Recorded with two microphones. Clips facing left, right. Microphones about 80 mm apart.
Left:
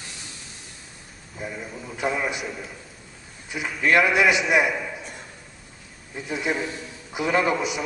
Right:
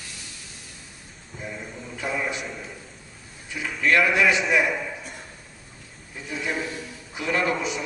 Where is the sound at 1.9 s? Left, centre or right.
Centre.